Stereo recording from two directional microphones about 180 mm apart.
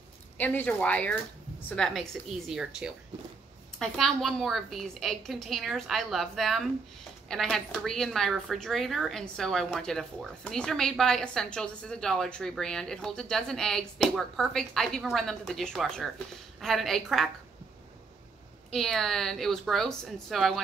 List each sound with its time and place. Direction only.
0.4 s speech: 10° left (ahead or behind)
18.7 s speech: centre (ahead or behind)